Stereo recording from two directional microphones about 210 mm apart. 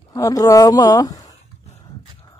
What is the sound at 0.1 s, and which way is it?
A woman's voice, 15° left (ahead or behind).